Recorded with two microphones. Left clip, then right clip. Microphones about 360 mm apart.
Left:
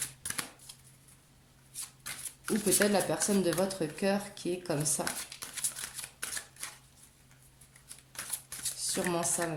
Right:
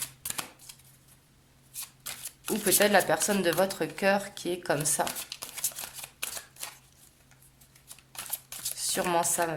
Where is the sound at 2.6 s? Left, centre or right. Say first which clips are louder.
Right 6 dB; right.